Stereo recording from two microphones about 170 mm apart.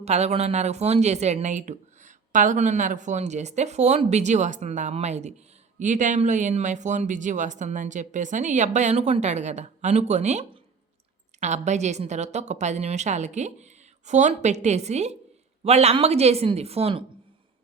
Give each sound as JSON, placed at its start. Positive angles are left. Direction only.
{"t": 0.0, "sound": "speech", "side_deg": -40}